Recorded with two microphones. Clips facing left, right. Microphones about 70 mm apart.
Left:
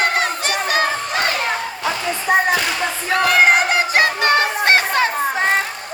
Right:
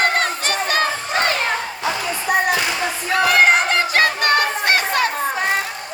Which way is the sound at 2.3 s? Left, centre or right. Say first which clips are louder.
Left 3 dB; left.